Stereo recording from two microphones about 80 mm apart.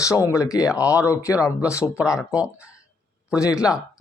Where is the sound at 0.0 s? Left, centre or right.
Left.